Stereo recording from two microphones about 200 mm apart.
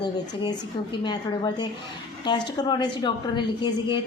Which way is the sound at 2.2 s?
20° left (ahead or behind).